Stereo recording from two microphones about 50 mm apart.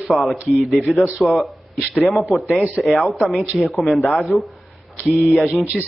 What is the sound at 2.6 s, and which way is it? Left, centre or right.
Speech, centre.